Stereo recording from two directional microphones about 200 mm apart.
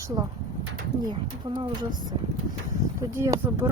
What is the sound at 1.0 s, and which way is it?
Speech, 25° right (ahead or behind).